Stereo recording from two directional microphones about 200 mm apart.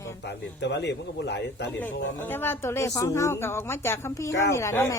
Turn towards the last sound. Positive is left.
turn(degrees=15)  # may be behind; listen again after turning